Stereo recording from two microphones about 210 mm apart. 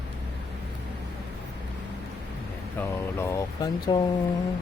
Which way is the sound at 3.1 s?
15° left (ahead or behind).